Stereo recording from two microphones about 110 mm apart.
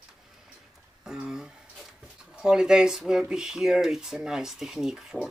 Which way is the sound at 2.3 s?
5° right (ahead or behind).